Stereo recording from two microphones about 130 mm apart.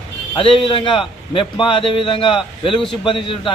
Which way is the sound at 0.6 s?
40° left (ahead or behind).